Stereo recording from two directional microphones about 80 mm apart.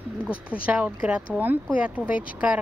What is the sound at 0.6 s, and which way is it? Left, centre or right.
A woman's voice, centre.